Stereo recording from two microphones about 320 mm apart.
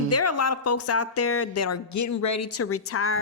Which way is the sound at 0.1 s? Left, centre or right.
Left.